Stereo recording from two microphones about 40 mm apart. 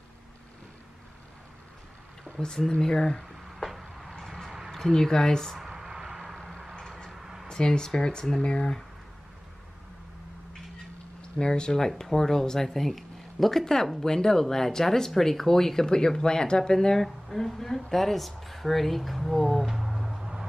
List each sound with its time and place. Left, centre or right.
2.3 s speech: centre
3.6 s a sound: centre
4.6 s speech: centre
5.6 s a sound: centre
7.4 s speech: centre
11.3 s speech: left
17.0 s speech: centre